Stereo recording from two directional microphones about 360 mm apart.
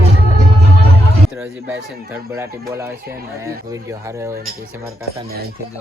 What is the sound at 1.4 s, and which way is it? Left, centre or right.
Speech, centre.